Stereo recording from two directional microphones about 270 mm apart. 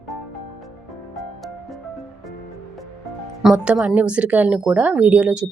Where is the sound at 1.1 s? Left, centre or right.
Centre.